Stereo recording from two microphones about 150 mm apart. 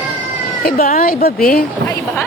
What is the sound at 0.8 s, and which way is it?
Speech, 65° left (ahead or behind).